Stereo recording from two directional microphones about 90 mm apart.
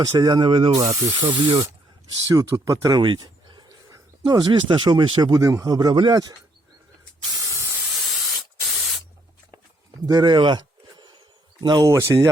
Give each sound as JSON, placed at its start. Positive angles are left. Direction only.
{"t": 0.0, "sound": "speech", "side_deg": -50}
{"t": 0.8, "sound": "speech", "side_deg": -35}
{"t": 4.7, "sound": "speech", "side_deg": -65}
{"t": 5.4, "sound": "speech", "side_deg": -35}
{"t": 7.4, "sound": "spray", "side_deg": -35}
{"t": 7.9, "sound": "spray", "side_deg": 0}
{"t": 10.1, "sound": "speech", "side_deg": -55}
{"t": 11.9, "sound": "speech", "side_deg": -40}